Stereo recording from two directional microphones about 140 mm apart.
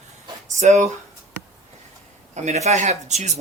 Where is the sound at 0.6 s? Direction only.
60° right (ahead or behind).